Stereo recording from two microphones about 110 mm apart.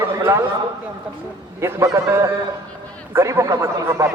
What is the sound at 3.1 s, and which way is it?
Speech, 25° right (ahead or behind).